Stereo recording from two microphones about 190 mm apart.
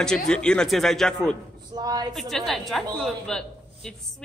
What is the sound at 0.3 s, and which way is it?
A woman's voice, 5° left (ahead or behind).